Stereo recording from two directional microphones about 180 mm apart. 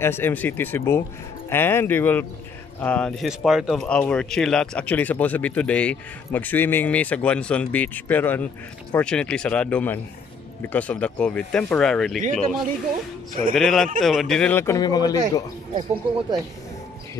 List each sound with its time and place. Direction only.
0.0 s speech: 10° left (ahead or behind)
13.3 s a man's voice: 50° right (ahead or behind)
13.6 s speech: centre (ahead or behind); by 15.1 s 20° left (ahead or behind)
15.7 s speech: 25° right (ahead or behind)